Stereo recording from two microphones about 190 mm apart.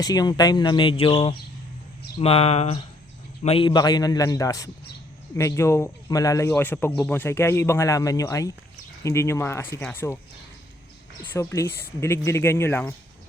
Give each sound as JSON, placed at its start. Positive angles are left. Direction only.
{"t": 0.0, "sound": "speech", "side_deg": 20}
{"t": 11.2, "sound": "speech", "side_deg": 15}